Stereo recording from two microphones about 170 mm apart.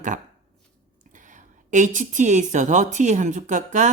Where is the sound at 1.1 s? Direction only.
50° right (ahead or behind).